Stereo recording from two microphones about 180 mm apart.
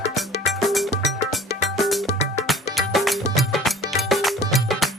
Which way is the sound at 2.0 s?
40° left (ahead or behind).